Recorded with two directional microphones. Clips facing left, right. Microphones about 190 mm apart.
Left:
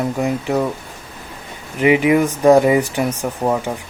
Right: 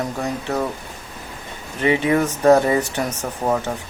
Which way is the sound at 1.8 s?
10° left (ahead or behind).